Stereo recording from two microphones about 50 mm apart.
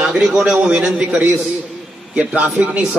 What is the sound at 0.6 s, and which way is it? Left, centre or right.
Speech, right.